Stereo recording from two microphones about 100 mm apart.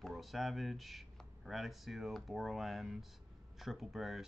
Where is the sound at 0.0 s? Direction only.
Centre (ahead or behind).